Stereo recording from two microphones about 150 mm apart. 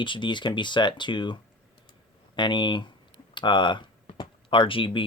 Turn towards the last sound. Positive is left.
turn(degrees=35)  # may be behind; listen again after turning